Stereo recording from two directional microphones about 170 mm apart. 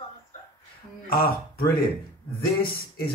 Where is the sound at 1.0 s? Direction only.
60° left (ahead or behind).